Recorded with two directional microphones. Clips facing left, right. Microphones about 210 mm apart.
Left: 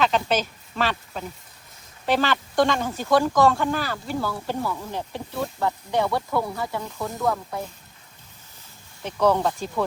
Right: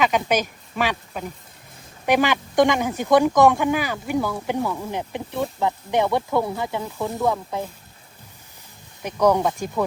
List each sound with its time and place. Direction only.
0.0 s speech: 15° right (ahead or behind)
9.0 s speech: 15° right (ahead or behind)